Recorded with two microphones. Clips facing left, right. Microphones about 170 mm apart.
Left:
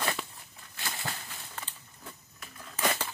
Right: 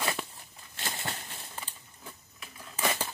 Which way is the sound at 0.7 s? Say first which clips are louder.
Right 1 dB; 25° right (ahead or behind).